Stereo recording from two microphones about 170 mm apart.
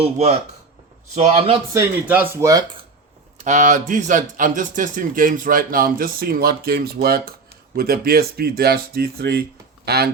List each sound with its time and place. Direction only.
0.0 s a man's voice: 40° right (ahead or behind)
1.7 s speech: 15° right (ahead or behind)
3.3 s speech: 45° right (ahead or behind); by 10.1 s 70° right (ahead or behind)